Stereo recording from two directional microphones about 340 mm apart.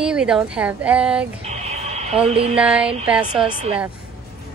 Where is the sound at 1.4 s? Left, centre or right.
Centre.